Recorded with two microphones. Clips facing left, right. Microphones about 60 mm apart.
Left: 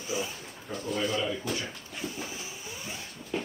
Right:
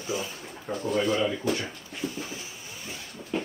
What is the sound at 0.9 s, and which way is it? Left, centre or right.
Speech, right.